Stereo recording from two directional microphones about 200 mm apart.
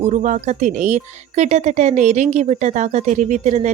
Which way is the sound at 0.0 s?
35° right (ahead or behind).